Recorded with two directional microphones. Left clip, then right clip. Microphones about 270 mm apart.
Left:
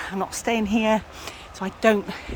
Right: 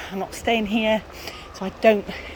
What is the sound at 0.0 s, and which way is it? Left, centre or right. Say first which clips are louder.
Speech: even; centre.